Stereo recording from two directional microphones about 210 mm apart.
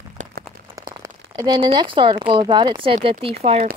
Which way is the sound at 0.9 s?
20° right (ahead or behind).